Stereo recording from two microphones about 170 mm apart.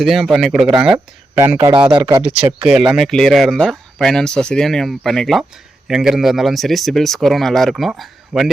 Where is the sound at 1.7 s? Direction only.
30° right (ahead or behind).